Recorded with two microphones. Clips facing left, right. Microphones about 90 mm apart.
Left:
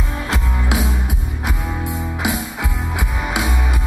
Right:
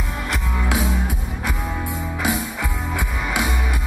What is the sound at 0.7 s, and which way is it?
Music, 20° left (ahead or behind).